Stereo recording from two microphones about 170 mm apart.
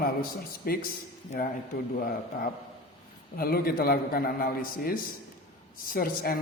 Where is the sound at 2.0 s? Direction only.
60° left (ahead or behind).